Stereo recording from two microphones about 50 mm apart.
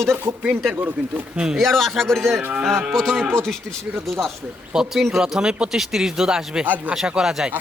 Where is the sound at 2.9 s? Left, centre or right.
Centre.